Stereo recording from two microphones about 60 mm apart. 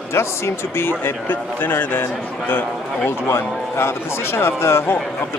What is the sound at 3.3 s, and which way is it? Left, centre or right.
A man's voice, left.